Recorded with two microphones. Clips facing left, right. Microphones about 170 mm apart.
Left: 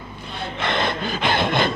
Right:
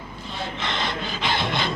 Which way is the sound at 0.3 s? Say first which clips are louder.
Left 4 dB; 60° left (ahead or behind).